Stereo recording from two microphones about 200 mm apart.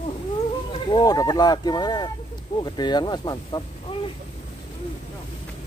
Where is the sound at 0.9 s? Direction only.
20° left (ahead or behind).